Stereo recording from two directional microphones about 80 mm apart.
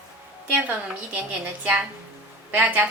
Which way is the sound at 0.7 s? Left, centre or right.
Centre.